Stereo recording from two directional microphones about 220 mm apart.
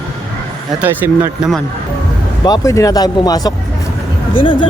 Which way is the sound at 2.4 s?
15° left (ahead or behind).